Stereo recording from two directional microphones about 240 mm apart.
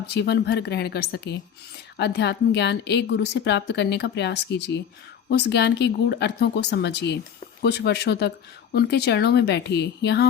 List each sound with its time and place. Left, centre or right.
0.1 s a woman's voice: left